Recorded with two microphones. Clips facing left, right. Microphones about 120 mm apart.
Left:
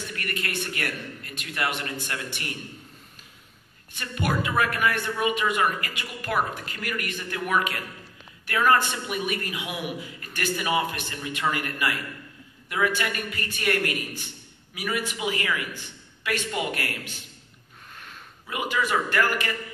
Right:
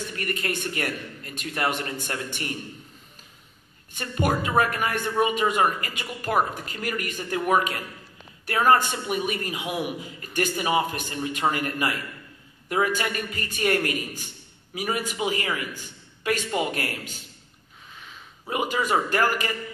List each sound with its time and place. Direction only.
0.1 s a man's voice: 35° right (ahead or behind)
4.0 s a man's voice: 40° right (ahead or behind)
18.5 s a man's voice: 40° right (ahead or behind)